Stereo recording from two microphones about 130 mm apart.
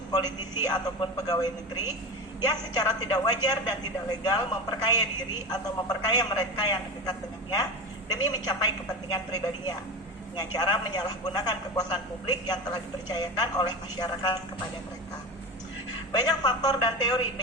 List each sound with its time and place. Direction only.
0.6 s a woman's voice: 30° left (ahead or behind)
16.1 s a man's voice: 30° left (ahead or behind)